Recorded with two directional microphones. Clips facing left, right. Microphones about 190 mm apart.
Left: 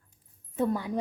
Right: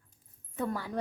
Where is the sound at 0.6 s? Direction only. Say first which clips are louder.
Left 6 dB; 20° left (ahead or behind).